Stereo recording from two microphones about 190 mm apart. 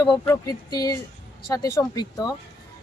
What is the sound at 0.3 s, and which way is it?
A woman's voice, 20° left (ahead or behind).